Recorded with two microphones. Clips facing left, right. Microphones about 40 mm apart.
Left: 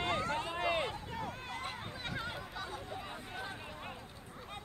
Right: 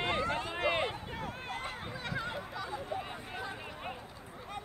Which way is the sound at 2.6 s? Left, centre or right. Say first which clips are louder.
Right 5 dB; right.